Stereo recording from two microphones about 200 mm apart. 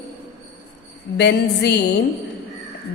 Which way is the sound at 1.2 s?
55° left (ahead or behind).